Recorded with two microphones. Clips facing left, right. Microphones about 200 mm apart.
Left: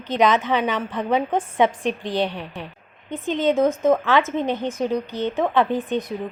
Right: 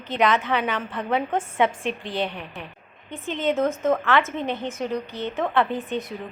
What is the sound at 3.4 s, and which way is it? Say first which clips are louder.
Speech: left 4 dB; 15° left (ahead or behind).